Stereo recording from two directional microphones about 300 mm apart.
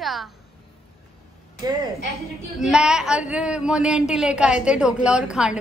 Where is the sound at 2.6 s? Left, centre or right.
Centre.